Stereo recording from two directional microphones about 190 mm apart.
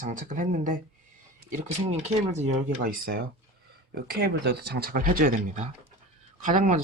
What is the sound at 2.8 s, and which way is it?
Speech, 50° right (ahead or behind).